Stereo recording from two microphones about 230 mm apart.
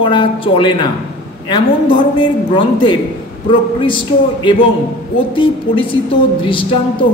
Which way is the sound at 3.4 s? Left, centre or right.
Left.